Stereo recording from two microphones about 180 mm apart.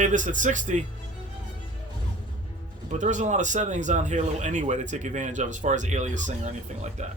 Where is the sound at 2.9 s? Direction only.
45° right (ahead or behind).